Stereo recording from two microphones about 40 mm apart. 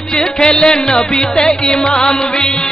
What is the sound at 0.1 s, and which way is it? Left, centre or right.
Music, left.